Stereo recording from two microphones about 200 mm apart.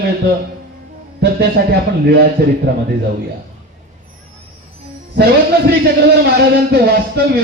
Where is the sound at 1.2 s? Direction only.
55° right (ahead or behind).